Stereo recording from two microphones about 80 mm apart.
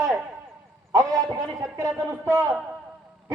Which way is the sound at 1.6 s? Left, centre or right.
Right.